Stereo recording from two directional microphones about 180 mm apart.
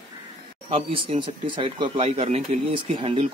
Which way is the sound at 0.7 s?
30° right (ahead or behind).